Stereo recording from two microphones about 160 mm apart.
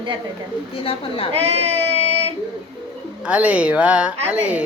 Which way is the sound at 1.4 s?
40° right (ahead or behind).